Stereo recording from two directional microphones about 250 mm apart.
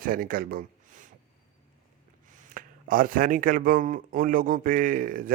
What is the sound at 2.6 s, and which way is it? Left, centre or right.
Speech, right.